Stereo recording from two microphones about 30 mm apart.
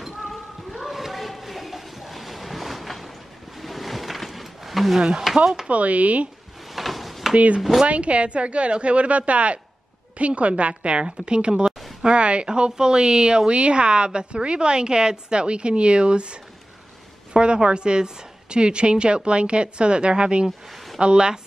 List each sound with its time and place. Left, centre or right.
0.3 s a sound: centre
3.5 s wild animals: centre
4.9 s a woman's voice: centre
5.7 s a woman's voice: right
6.7 s drawer open or close: centre
7.3 s a woman's voice: right
12.4 s a woman's voice: right
17.3 s a sound: right
17.6 s a woman's voice: right